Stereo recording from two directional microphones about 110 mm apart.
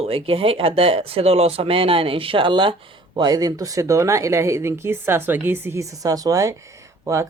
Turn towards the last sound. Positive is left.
turn(degrees=-25)  # may be behind; listen again after turning